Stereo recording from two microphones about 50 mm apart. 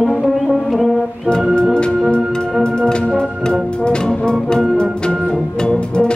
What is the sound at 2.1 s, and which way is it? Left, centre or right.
Music, centre.